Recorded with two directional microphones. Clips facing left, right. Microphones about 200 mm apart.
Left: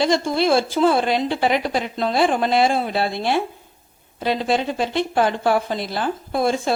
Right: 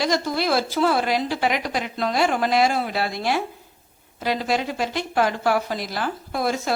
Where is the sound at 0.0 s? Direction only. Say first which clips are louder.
Left 4 dB; 25° left (ahead or behind).